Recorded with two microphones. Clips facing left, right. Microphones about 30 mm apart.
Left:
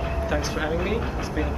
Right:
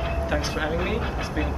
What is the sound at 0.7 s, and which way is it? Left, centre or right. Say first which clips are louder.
Speech: left 1 dB; centre.